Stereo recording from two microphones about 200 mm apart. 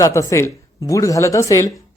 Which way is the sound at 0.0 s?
15° left (ahead or behind).